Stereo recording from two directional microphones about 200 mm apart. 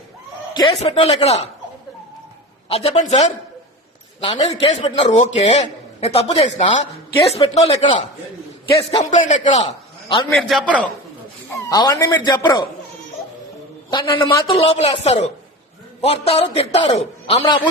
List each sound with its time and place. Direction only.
0.5 s a man's voice: 25° left (ahead or behind)
2.6 s a man's voice: 30° left (ahead or behind)
9.0 s a man's voice: 40° left (ahead or behind)
10.2 s a man's voice: centre (ahead or behind)
11.7 s speech: 15° left (ahead or behind)
13.9 s speech: 25° left (ahead or behind)